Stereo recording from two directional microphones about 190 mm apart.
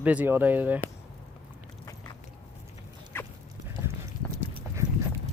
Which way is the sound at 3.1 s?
10° left (ahead or behind).